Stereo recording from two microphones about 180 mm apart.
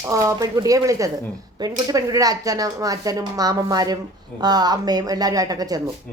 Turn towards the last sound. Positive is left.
turn(degrees=-20)  # may be behind; listen again after turning